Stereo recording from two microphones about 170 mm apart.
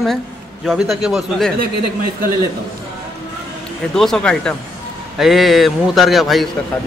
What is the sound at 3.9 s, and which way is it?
Speech, 5° left (ahead or behind).